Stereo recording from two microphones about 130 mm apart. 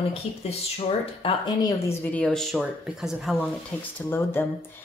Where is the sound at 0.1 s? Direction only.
50° left (ahead or behind).